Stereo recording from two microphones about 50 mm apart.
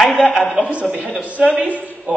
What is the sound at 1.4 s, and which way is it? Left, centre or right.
Speech, centre.